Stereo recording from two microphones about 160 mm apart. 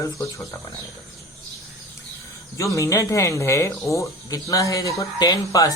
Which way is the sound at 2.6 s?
20° left (ahead or behind).